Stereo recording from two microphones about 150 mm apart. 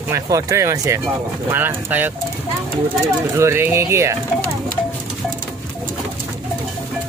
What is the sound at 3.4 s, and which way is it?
Speech, 15° right (ahead or behind).